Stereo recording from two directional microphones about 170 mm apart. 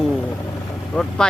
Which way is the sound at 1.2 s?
5° left (ahead or behind).